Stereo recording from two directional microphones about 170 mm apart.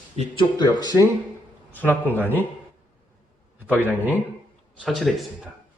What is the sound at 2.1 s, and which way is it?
Speech, 10° right (ahead or behind).